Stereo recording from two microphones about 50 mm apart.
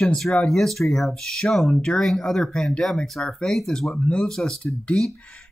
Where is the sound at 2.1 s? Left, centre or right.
Centre.